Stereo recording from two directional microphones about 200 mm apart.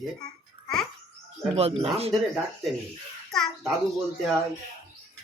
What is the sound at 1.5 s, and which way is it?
Speech, 30° right (ahead or behind).